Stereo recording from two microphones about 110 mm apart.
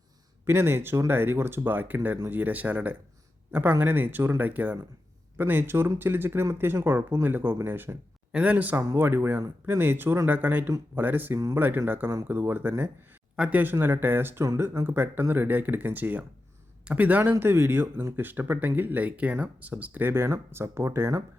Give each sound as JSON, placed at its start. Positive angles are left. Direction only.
{"t": 0.4, "sound": "speech", "side_deg": -20}
{"t": 11.3, "sound": "speech", "side_deg": -30}
{"t": 11.9, "sound": "speech", "side_deg": -15}